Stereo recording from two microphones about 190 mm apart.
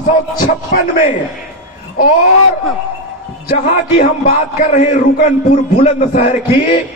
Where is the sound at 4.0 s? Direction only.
40° left (ahead or behind).